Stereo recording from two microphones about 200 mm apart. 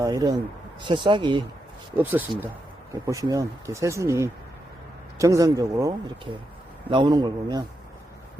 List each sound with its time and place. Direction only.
0.0 s speech: 20° right (ahead or behind)
2.0 s speech: 10° right (ahead or behind)
6.9 s speech: 20° right (ahead or behind)